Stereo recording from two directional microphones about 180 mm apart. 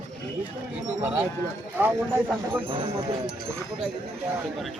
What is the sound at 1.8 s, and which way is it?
Speech, 10° right (ahead or behind).